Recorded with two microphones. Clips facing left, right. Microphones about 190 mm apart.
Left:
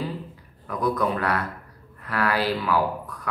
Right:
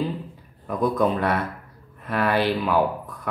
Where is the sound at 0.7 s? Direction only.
25° right (ahead or behind).